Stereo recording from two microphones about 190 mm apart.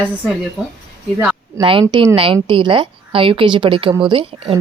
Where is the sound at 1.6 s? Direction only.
25° right (ahead or behind).